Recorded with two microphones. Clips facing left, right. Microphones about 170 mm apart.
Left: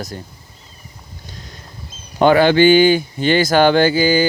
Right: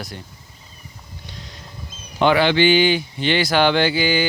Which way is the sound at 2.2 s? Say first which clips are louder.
Left 5 dB; 45° left (ahead or behind).